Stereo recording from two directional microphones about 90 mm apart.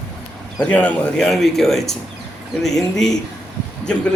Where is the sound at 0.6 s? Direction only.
15° left (ahead or behind).